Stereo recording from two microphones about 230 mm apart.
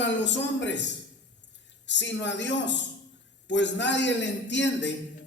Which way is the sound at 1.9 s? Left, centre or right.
Left.